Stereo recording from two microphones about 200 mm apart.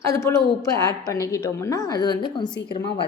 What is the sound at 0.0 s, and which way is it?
A woman's voice, 15° left (ahead or behind).